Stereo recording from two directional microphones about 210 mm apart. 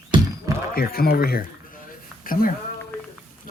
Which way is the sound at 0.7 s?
45° left (ahead or behind).